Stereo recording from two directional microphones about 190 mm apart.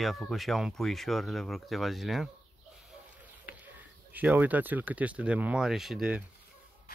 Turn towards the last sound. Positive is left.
turn(degrees=-5)  # may be behind; listen again after turning